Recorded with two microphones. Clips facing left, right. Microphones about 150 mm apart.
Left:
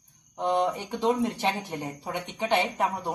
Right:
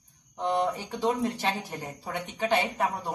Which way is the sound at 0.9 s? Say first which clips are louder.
Left 3 dB; 20° left (ahead or behind).